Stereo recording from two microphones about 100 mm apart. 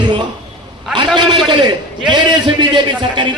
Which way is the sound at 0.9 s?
50° right (ahead or behind).